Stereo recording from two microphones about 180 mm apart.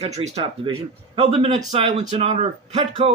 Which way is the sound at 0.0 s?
35° right (ahead or behind).